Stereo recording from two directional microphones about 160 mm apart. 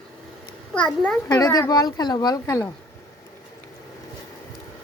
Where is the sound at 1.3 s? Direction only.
25° left (ahead or behind).